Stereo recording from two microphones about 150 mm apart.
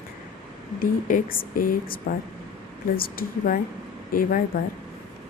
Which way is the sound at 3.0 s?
70° left (ahead or behind).